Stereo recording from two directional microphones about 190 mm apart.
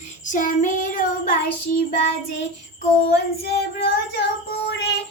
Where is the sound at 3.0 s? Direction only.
55° left (ahead or behind).